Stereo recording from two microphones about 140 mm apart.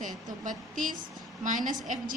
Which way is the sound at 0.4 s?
70° right (ahead or behind).